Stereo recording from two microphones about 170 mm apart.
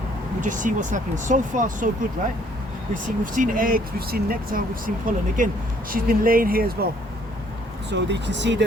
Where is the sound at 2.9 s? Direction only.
50° right (ahead or behind).